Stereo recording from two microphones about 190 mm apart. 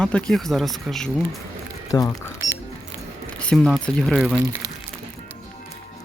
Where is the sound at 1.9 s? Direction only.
20° left (ahead or behind).